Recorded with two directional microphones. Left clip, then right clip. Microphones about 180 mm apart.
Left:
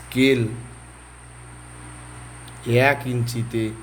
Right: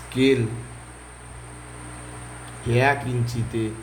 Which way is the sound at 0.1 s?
45° left (ahead or behind).